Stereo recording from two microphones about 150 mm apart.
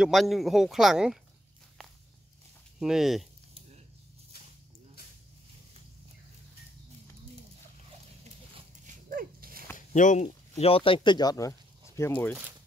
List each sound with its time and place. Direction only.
0.0 s speech: centre (ahead or behind)
2.8 s speech: centre (ahead or behind)
8.2 s dog: 45° right (ahead or behind)
9.1 s dog: 75° right (ahead or behind)
9.8 s speech: 55° left (ahead or behind); by 11.5 s 25° left (ahead or behind)
12.0 s speech: 10° left (ahead or behind)